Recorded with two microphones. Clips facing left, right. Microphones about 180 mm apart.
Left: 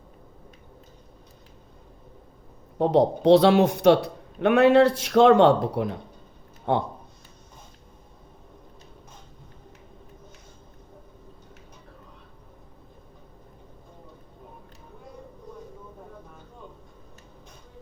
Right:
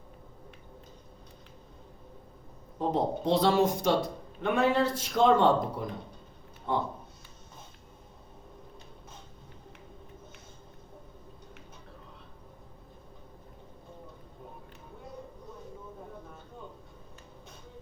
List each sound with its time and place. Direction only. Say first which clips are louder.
2.7 s a man's voice: left 9 dB; 70° left (ahead or behind)